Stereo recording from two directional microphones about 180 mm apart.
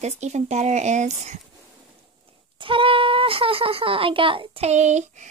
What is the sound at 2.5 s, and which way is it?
Speech, 30° right (ahead or behind).